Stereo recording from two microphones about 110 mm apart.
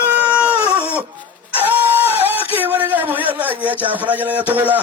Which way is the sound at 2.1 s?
15° right (ahead or behind).